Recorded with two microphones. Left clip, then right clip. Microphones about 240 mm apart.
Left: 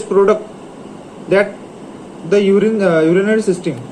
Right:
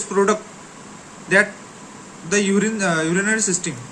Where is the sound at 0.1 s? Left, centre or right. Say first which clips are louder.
Left 7 dB; right.